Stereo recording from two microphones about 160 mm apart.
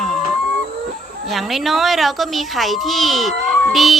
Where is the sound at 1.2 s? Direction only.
Centre (ahead or behind).